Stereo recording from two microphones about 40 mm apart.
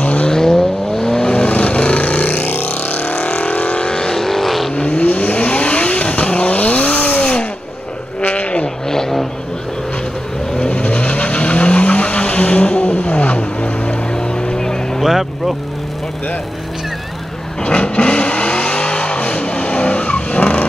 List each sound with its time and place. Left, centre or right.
0.0 s vehicle: left
0.3 s vehicle: centre; by 3.2 s left
3.2 s vehicle: left
3.9 s vehicle: centre
4.7 s vehicle: left
8.2 s a sound: left
8.8 s vehicle: centre
10.7 s vehicle: left
14.1 s vehicle: centre
15.0 s vehicle: centre
17.6 s vehicle: left